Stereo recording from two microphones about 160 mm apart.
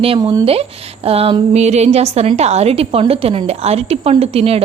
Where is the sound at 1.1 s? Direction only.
35° right (ahead or behind).